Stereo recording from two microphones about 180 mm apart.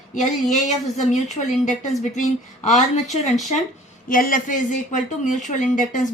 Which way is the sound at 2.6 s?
40° left (ahead or behind).